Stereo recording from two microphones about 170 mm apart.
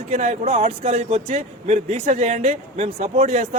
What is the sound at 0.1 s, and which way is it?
Speech, 45° right (ahead or behind).